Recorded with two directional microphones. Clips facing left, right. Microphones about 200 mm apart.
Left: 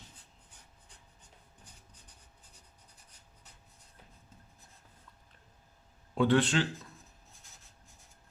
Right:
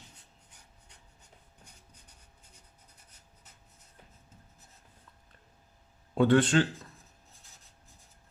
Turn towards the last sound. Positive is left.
turn(degrees=-45)  # may be behind; listen again after turning